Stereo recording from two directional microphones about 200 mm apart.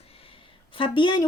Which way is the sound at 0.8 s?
25° left (ahead or behind).